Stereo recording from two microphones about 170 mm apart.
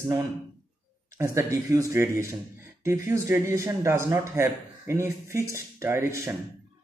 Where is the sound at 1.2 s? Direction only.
15° right (ahead or behind).